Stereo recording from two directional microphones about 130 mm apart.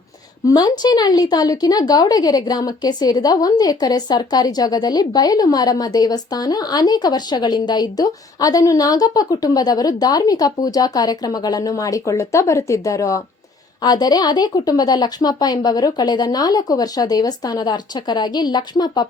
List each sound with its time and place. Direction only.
0.4 s a woman's voice: 30° left (ahead or behind)